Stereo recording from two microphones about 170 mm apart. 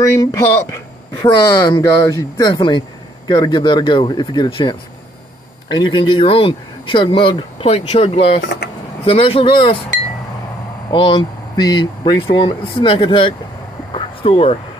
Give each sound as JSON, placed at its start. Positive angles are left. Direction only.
{"t": 0.0, "sound": "speech", "side_deg": 20}
{"t": 10.9, "sound": "speech", "side_deg": 30}
{"t": 13.9, "sound": "a sound", "side_deg": 35}